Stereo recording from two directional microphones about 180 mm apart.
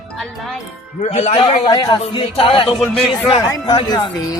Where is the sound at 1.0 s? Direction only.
40° left (ahead or behind).